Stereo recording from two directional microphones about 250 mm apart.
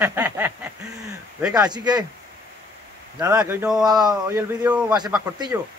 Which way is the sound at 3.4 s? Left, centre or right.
Centre.